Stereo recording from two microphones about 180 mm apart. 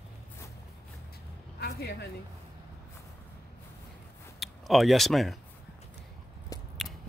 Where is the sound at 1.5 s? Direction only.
60° left (ahead or behind).